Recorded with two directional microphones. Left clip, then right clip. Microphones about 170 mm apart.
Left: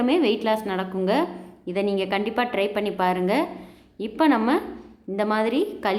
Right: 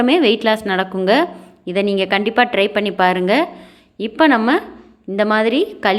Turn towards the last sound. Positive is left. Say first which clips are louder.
# right 7 dB
turn(degrees=-20)  # may be behind; listen again after turning